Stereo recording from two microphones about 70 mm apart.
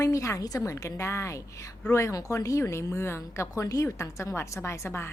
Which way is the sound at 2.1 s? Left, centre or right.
Left.